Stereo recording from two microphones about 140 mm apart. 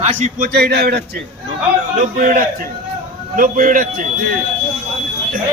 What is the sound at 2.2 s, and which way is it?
A man's voice, 80° right.